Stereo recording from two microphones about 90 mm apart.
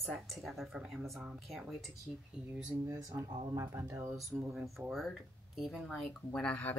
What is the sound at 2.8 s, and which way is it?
Speech, 40° right (ahead or behind).